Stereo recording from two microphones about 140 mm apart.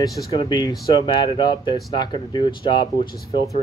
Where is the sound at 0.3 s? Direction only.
35° left (ahead or behind).